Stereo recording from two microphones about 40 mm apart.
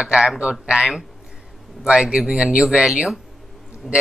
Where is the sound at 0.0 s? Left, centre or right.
Centre.